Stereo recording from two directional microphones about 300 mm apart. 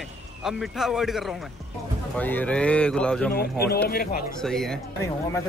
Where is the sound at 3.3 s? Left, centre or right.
Left.